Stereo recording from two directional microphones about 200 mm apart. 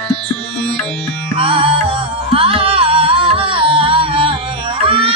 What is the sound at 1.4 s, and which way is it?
Music, 25° right (ahead or behind).